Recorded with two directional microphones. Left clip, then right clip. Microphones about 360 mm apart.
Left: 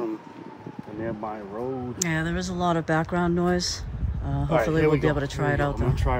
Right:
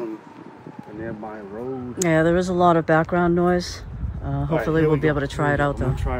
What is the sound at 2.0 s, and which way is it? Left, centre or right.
Speech, centre.